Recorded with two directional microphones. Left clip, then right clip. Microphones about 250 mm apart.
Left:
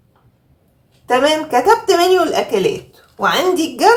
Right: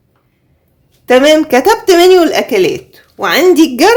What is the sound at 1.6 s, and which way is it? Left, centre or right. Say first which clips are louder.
Speech: right 5 dB; right.